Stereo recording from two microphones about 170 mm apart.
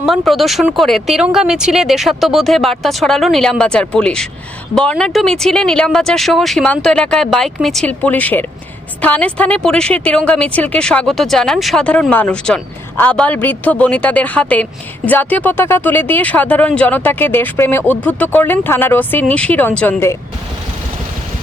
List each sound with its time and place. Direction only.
0.0 s a woman's voice: centre (ahead or behind)